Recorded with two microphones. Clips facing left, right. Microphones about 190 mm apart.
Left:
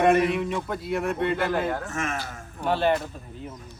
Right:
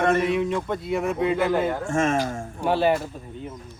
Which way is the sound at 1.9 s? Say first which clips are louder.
Right 8 dB; 30° right (ahead or behind).